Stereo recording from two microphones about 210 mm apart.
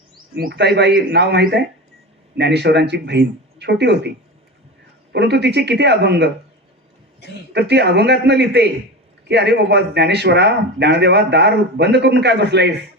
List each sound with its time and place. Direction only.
0.3 s speech: 50° right (ahead or behind)
5.1 s speech: 55° right (ahead or behind)
7.5 s speech: 55° right (ahead or behind)